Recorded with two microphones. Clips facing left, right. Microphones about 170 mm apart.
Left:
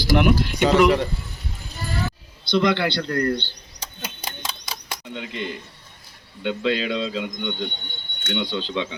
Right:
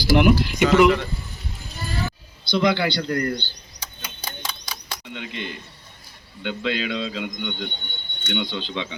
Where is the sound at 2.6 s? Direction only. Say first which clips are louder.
Even; 5° right (ahead or behind).